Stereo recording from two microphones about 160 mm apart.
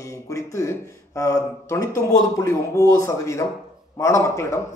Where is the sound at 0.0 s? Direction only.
20° left (ahead or behind).